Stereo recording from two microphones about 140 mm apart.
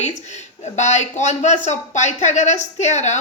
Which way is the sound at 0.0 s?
55° left (ahead or behind).